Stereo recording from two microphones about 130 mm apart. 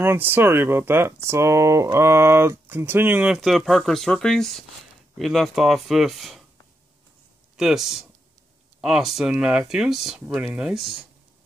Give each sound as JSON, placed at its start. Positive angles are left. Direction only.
{"t": 0.0, "sound": "speech", "side_deg": -15}
{"t": 7.5, "sound": "speech", "side_deg": -5}